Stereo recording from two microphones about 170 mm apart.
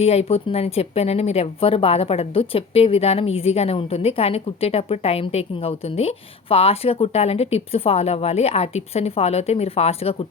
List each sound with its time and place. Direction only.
0.0 s speech: 35° left (ahead or behind)